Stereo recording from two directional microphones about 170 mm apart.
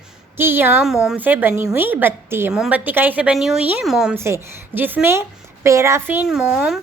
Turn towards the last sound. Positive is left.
turn(degrees=-5)  # may be behind; listen again after turning